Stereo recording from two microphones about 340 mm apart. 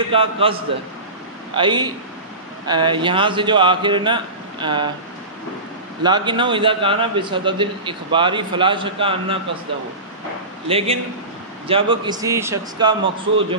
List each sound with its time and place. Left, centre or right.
0.1 s a man's voice: centre
6.0 s a man's voice: centre
10.7 s a man's voice: centre